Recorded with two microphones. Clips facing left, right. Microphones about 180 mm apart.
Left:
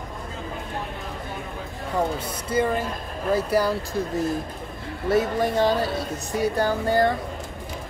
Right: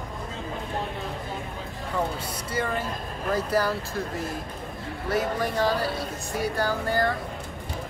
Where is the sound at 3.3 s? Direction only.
10° left (ahead or behind).